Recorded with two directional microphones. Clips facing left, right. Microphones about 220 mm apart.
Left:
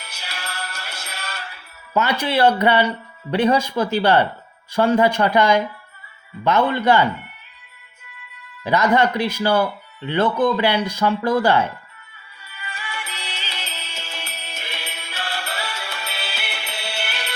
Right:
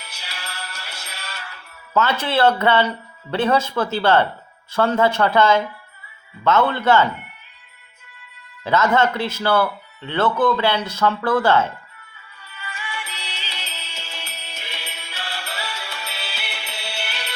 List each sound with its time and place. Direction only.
0.0 s music: 50° left (ahead or behind)
1.5 s speech: 10° left (ahead or behind)
8.6 s speech: 15° left (ahead or behind)
12.6 s music: 40° left (ahead or behind)